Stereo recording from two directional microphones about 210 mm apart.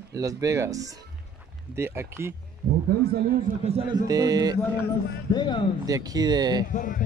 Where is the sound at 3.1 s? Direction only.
45° right (ahead or behind).